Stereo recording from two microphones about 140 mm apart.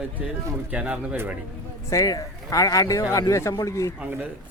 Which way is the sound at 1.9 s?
25° left (ahead or behind).